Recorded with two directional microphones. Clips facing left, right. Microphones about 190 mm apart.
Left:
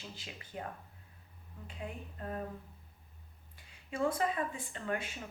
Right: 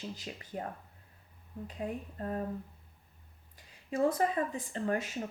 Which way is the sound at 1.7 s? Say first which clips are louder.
Right 6 dB; 40° right (ahead or behind).